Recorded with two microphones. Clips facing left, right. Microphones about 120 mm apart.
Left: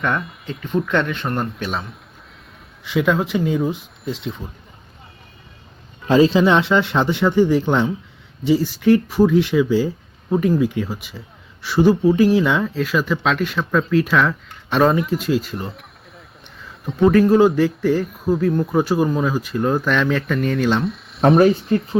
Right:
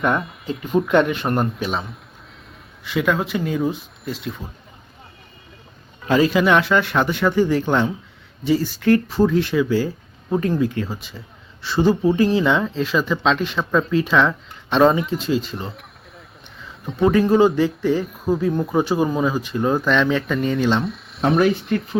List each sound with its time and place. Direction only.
0.0 s speech: centre (ahead or behind)
3.1 s speech: 10° left (ahead or behind)
6.1 s speech: 25° left (ahead or behind); by 21.3 s centre (ahead or behind)
21.7 s speech: 30° left (ahead or behind)